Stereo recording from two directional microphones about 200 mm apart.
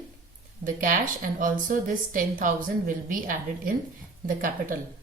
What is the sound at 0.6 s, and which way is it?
A woman's voice, 45° right (ahead or behind).